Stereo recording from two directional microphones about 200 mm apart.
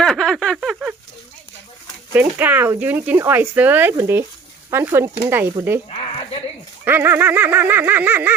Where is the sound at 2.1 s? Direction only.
10° right (ahead or behind).